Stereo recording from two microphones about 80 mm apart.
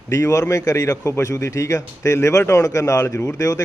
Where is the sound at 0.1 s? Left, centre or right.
Left.